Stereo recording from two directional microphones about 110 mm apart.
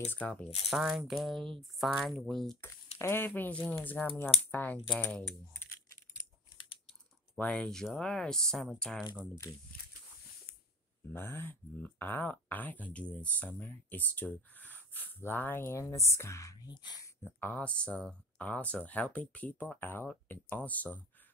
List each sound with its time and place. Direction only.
0.1 s speech: 15° left (ahead or behind)
0.7 s speech: centre (ahead or behind)
2.6 s speech: 20° left (ahead or behind)
4.8 s speech: 5° left (ahead or behind)
7.3 s speech: 10° left (ahead or behind)
11.1 s speech: 20° left (ahead or behind)
16.7 s speech: 40° left (ahead or behind)
17.2 s speech: 20° left (ahead or behind)
17.6 s speech: 10° left (ahead or behind)